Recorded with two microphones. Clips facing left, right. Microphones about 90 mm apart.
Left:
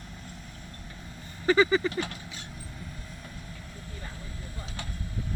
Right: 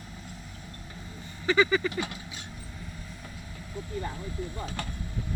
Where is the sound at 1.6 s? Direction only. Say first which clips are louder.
Left 1 dB; 30° left (ahead or behind).